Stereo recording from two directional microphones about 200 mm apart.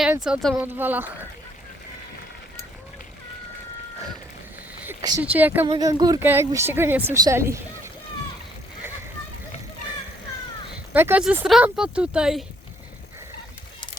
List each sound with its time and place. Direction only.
0.0 s a woman's voice: 5° right (ahead or behind)
4.9 s speech: 20° right (ahead or behind)
5.2 s a woman's voice: 10° right (ahead or behind)
5.6 s a woman's voice: 20° right (ahead or behind)
10.9 s speech: 10° right (ahead or behind)